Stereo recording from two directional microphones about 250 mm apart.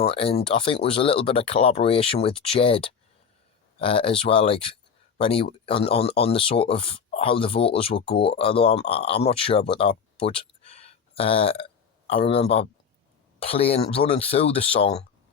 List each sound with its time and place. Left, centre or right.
0.0 s speech: left